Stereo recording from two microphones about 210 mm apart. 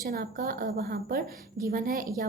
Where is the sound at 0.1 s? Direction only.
40° right (ahead or behind).